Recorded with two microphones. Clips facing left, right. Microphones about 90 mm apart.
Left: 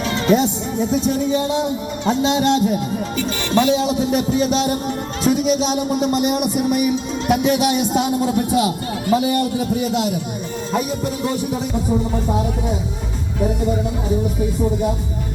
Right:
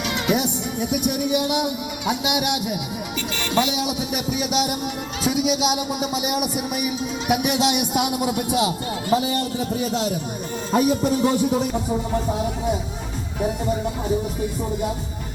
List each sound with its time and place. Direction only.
0.3 s speech: 15° right (ahead or behind)
7.4 s speech: 20° right (ahead or behind); by 10.1 s 35° right (ahead or behind)
10.7 s speech: 5° right (ahead or behind)